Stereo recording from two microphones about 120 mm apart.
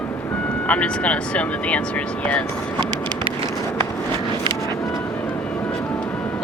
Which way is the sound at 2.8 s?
45° right (ahead or behind).